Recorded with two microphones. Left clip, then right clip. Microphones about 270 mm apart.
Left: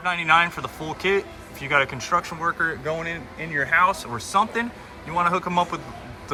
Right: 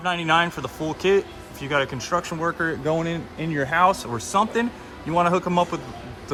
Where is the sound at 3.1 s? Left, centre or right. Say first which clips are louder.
Right 1 dB; right.